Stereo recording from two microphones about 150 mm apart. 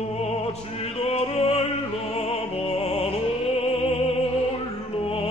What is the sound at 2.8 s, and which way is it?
Music, 40° left (ahead or behind).